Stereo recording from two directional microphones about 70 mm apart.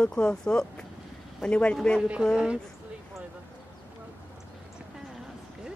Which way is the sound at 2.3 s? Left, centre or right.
Centre.